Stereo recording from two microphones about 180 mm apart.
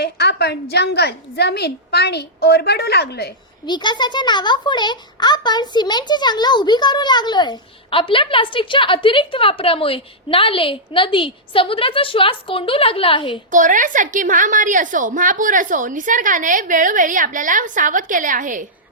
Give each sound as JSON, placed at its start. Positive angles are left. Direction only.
{"t": 0.0, "sound": "a woman's voice", "side_deg": 65}
{"t": 3.7, "sound": "a child's voice", "side_deg": 25}
{"t": 13.5, "sound": "a woman's voice", "side_deg": -45}